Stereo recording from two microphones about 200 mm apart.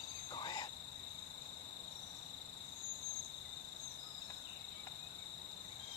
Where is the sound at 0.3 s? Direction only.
20° left (ahead or behind).